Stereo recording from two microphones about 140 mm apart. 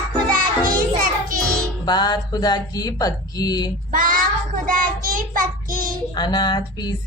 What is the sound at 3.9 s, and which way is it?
Child singing, 75° right (ahead or behind).